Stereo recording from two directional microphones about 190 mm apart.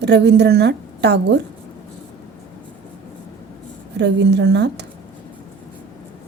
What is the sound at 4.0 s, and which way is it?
Speech, 65° right (ahead or behind).